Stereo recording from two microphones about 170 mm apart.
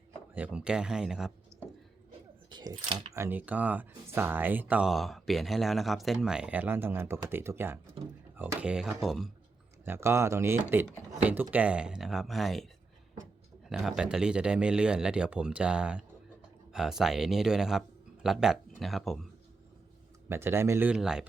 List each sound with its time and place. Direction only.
0.3 s speech: 5° right (ahead or behind)
2.5 s speech: 25° right (ahead or behind)
3.2 s speech: 10° right (ahead or behind)
9.8 s speech: 15° right (ahead or behind)
13.7 s speech: 5° right (ahead or behind)
20.3 s speech: 15° right (ahead or behind)